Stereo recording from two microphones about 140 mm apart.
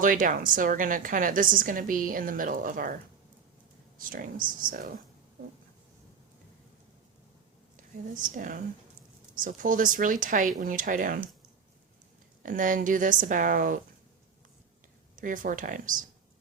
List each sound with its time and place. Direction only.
0.0 s a woman's voice: 70° right (ahead or behind)
3.9 s a woman's voice: 80° right
8.4 s a woman's voice: 70° right (ahead or behind)
12.4 s a woman's voice: 70° right (ahead or behind)
15.1 s a woman's voice: 75° right (ahead or behind)